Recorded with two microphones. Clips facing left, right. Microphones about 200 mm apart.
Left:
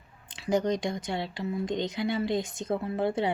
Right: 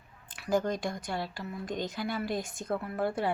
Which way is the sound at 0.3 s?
20° left (ahead or behind).